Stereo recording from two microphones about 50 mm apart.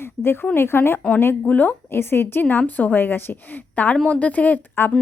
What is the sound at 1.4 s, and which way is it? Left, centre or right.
Speech, left.